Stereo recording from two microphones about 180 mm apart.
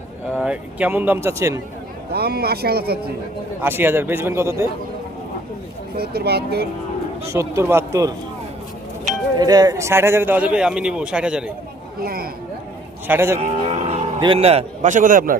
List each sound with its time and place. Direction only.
0.3 s a man's voice: 5° right (ahead or behind)
2.1 s speech: 60° right (ahead or behind)
3.6 s a man's voice: 10° right (ahead or behind)
6.0 s speech: 60° right (ahead or behind)
7.3 s a man's voice: 15° right (ahead or behind)
9.4 s a man's voice: 20° right (ahead or behind); by 11.5 s 5° right (ahead or behind)
11.9 s speech: 55° right (ahead or behind)
13.1 s a man's voice: 15° right (ahead or behind)
13.7 s a man's voice: 35° right (ahead or behind)